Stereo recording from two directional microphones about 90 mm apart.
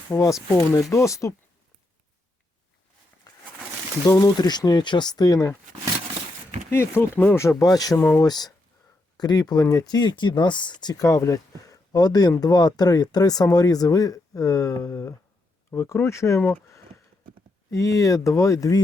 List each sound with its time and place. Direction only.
0.1 s speech: 20° left (ahead or behind)
3.3 s pigeon: 45° left (ahead or behind)
4.0 s speech: 45° left (ahead or behind)
6.7 s speech: 25° left (ahead or behind)
7.4 s speech: 40° left (ahead or behind)
7.9 s speech: 25° left (ahead or behind)
8.2 s speech: 45° left (ahead or behind)